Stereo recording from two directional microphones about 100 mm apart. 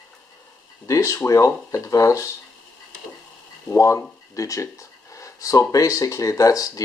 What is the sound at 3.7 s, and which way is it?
Speech, 35° left (ahead or behind).